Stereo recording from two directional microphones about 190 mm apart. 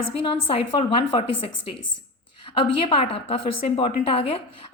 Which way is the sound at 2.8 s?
30° left (ahead or behind).